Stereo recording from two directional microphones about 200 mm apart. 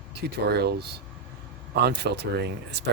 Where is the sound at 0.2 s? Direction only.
55° right (ahead or behind).